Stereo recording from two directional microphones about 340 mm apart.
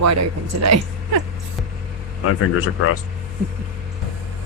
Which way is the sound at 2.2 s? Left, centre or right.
Left.